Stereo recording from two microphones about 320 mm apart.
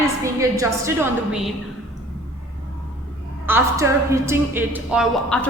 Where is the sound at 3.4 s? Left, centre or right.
Centre.